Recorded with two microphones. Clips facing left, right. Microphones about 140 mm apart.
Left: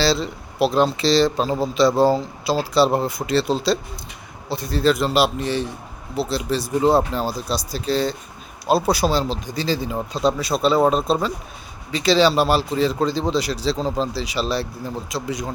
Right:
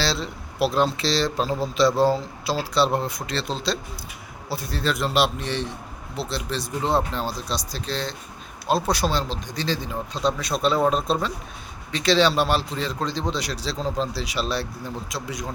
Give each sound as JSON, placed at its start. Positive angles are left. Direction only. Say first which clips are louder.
{"t": 0.0, "sound": "speech", "louder": "left 6 dB", "side_deg": 0}